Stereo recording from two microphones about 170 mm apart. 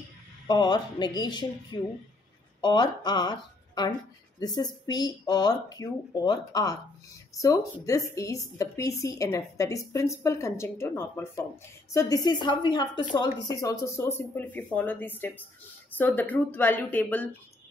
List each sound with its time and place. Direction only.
0.5 s speech: 25° left (ahead or behind)